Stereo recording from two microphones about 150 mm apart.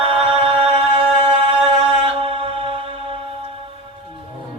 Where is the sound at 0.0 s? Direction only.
40° right (ahead or behind).